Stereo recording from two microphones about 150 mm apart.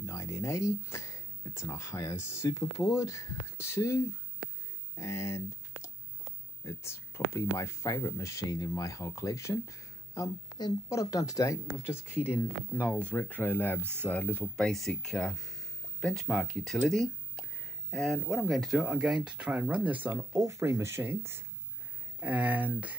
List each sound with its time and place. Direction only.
0.0 s speech: 20° left (ahead or behind); by 22.8 s 10° right (ahead or behind)